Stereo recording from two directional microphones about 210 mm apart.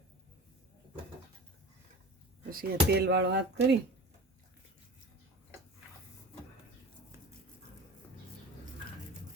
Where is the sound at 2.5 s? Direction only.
45° right (ahead or behind).